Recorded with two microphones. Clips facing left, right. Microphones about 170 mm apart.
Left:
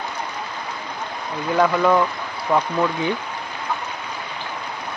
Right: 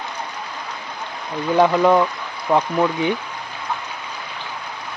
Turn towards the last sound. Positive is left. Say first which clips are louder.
# right 2 dB
turn(degrees=-20)  # may be behind; listen again after turning